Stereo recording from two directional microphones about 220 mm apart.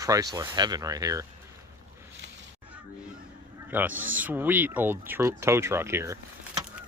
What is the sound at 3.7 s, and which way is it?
Speech, 10° right (ahead or behind).